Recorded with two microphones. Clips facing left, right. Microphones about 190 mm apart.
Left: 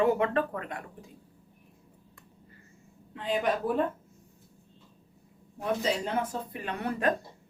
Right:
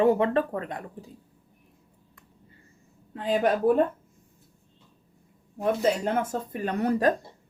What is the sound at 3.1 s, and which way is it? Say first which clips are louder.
Speech: right 5 dB; 45° right (ahead or behind).